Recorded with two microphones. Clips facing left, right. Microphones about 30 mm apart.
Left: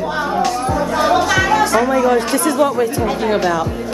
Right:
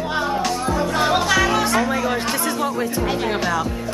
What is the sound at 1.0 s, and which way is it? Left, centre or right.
Music, centre.